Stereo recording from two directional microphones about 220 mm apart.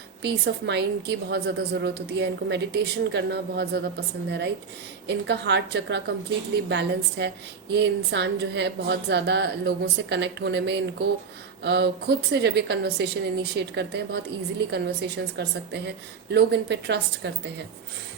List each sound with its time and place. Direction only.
0.2 s a woman's voice: 50° right (ahead or behind)
15.4 s a woman's voice: 50° right (ahead or behind)